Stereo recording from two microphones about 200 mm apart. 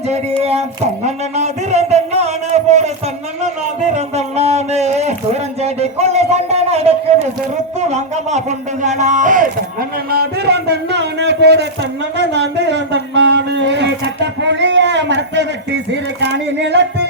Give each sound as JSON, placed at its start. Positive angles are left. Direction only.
{"t": 1.0, "sound": "a man's voice", "side_deg": -35}
{"t": 3.9, "sound": "a man's voice", "side_deg": -30}
{"t": 5.6, "sound": "a sound", "side_deg": -30}
{"t": 7.9, "sound": "a man's voice", "side_deg": -35}
{"t": 10.1, "sound": "a man's voice", "side_deg": -50}
{"t": 11.2, "sound": "a sound", "side_deg": -60}